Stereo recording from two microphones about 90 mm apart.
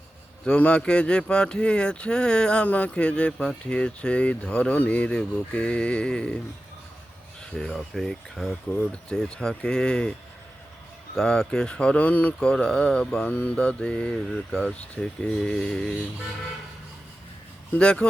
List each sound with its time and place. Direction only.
0.4 s speech: 10° left (ahead or behind)
7.5 s speech: 5° left (ahead or behind)
8.7 s speech: 15° left (ahead or behind)
11.1 s speech: 10° left (ahead or behind)
17.7 s speech: 10° left (ahead or behind)